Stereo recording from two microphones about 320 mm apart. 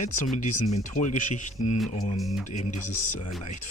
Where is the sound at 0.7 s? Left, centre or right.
Left.